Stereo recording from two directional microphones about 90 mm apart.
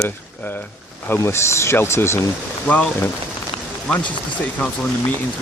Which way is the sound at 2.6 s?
15° left (ahead or behind).